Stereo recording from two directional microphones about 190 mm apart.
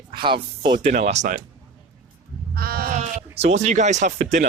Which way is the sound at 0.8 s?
35° right (ahead or behind).